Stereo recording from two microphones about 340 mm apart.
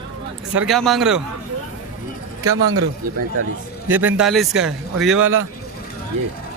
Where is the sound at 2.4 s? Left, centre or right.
Right.